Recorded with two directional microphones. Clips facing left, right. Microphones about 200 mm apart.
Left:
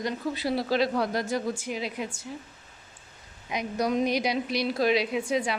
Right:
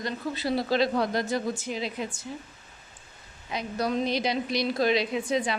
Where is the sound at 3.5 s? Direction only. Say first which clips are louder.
Left 1 dB; 15° left (ahead or behind).